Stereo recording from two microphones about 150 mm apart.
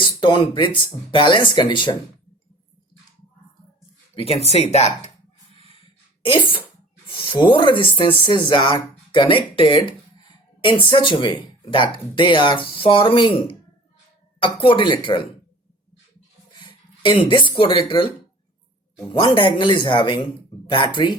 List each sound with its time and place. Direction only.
0.0 s speech: 35° left (ahead or behind)
4.1 s speech: 40° left (ahead or behind)
6.2 s speech: 35° left (ahead or behind)
16.6 s speech: 30° left (ahead or behind)